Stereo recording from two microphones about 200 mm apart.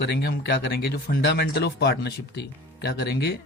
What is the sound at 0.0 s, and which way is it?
A man's voice, 55° left (ahead or behind).